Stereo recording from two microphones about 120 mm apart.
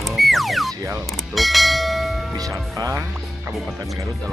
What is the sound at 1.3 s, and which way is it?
Bell, centre (ahead or behind).